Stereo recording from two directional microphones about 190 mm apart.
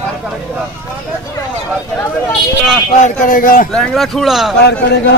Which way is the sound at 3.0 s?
45° left (ahead or behind).